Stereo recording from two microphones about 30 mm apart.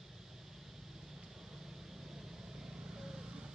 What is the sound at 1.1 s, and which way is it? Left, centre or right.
Vehicle, centre.